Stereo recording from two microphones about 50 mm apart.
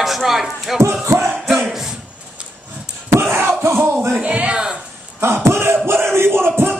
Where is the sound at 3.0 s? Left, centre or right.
Right.